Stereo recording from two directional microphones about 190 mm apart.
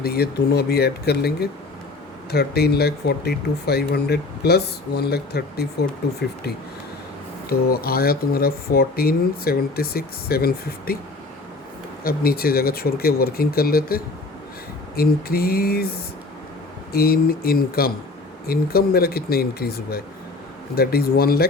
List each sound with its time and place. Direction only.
0.0 s speech: 55° left (ahead or behind)
7.5 s speech: 55° left (ahead or behind)
12.0 s speech: 50° left (ahead or behind)
16.9 s speech: 55° left (ahead or behind)